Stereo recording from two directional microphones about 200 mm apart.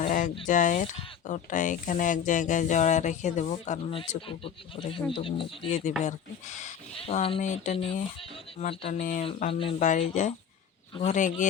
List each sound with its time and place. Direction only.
0.0 s a sound: 40° left (ahead or behind)
0.4 s speech: 40° left (ahead or behind)
9.2 s speech: 30° left (ahead or behind)